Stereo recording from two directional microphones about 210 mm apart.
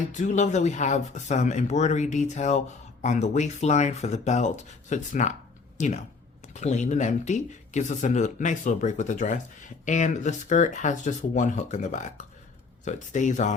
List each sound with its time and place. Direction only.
0.1 s speech: 35° left (ahead or behind)